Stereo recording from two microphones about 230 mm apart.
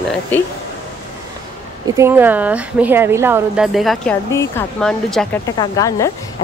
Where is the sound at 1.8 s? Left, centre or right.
Centre.